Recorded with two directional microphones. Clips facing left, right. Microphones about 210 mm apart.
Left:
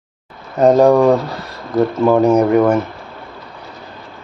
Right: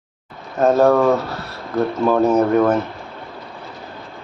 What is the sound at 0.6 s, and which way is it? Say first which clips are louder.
Speech: left 4 dB; 15° left (ahead or behind).